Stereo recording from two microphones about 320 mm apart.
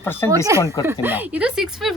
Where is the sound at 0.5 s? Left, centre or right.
Centre.